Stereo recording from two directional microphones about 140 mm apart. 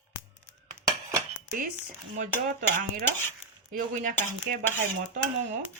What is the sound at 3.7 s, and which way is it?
Cutlery, 75° right (ahead or behind).